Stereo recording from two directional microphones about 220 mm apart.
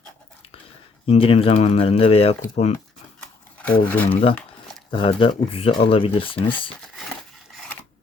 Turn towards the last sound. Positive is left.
turn(degrees=25)  # may be behind; listen again after turning